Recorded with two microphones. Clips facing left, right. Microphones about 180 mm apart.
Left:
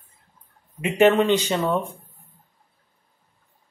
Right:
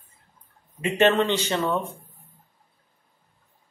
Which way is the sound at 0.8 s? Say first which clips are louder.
Left 3 dB; 15° left (ahead or behind).